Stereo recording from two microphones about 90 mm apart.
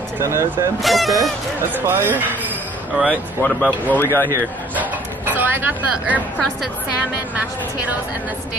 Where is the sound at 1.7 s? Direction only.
25° right (ahead or behind).